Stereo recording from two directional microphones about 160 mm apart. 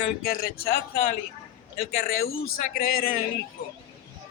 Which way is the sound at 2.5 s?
65° left (ahead or behind).